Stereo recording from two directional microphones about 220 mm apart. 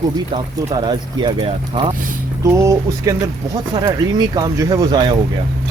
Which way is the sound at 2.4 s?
15° right (ahead or behind).